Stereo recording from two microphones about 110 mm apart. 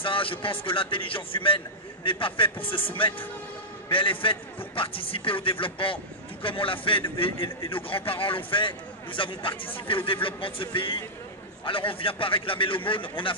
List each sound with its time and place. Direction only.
0.0 s a man's voice: 55° left (ahead or behind)